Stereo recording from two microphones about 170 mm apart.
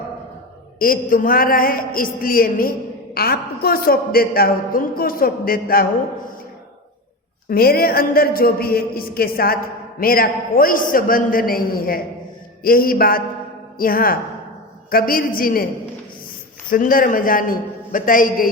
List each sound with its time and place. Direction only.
0.8 s a woman's voice: 55° left (ahead or behind)
7.5 s a woman's voice: 65° left (ahead or behind)
16.7 s a man's voice: 55° left (ahead or behind)